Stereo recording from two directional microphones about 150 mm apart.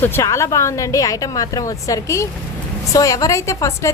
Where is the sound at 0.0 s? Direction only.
20° left (ahead or behind).